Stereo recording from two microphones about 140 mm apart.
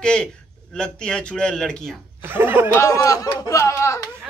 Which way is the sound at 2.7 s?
25° left (ahead or behind).